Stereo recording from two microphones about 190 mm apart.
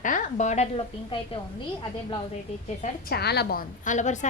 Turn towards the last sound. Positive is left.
turn(degrees=40)  # may be behind; listen again after turning